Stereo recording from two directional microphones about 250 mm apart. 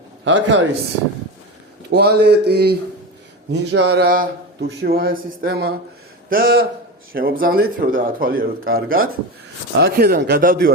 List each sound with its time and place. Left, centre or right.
0.3 s speech: right
1.9 s a man's voice: right